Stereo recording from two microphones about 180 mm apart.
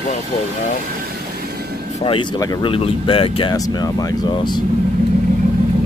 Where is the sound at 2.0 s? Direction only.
30° left (ahead or behind).